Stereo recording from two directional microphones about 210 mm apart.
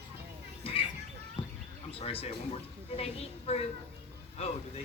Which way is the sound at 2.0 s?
25° left (ahead or behind).